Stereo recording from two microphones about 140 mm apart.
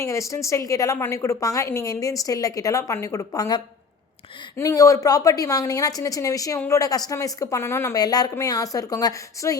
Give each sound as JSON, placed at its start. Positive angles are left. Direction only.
{"t": 0.0, "sound": "a woman's voice", "side_deg": 20}